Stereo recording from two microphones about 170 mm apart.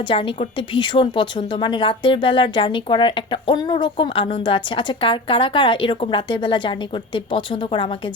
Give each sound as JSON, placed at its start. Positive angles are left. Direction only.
{"t": 0.1, "sound": "a woman's voice", "side_deg": 30}